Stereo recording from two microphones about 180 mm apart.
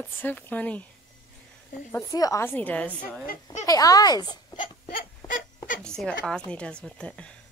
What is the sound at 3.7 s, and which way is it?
Speech, 20° left (ahead or behind).